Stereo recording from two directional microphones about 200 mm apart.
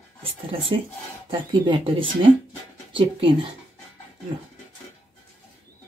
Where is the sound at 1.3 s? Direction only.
25° right (ahead or behind).